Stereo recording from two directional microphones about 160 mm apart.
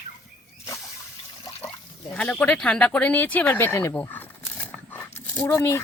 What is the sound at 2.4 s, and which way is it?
Speech, 5° left (ahead or behind).